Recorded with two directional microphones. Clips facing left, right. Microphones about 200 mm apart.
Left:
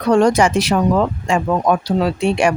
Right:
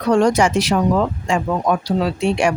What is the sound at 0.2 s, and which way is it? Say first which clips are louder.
Speech: left 2 dB; 60° left (ahead or behind).